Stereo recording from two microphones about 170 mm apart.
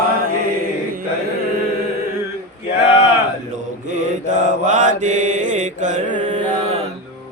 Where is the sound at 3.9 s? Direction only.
45° right (ahead or behind).